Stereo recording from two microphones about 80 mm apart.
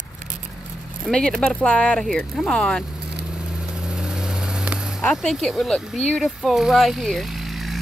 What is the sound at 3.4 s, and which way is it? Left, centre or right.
Vehicle, centre.